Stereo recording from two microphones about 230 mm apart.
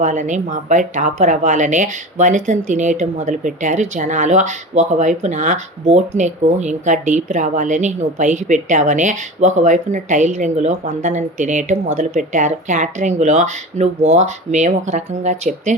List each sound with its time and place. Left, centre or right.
0.0 s speech: right